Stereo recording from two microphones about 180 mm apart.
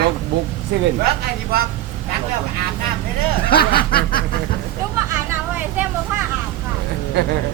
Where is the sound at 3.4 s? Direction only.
55° left (ahead or behind).